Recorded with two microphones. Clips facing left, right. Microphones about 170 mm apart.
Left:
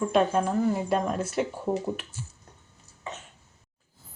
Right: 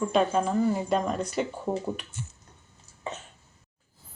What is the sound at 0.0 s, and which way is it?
Speech, centre (ahead or behind).